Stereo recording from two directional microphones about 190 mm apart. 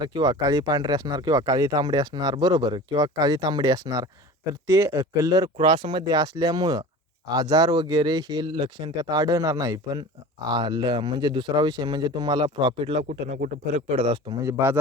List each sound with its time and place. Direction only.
0.0 s speech: 20° right (ahead or behind)